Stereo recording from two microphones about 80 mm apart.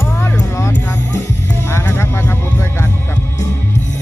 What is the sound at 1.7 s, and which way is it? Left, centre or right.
Vehicle, left.